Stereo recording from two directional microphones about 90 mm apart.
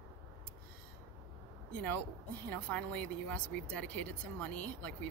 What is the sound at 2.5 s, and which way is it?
Speech, 15° left (ahead or behind).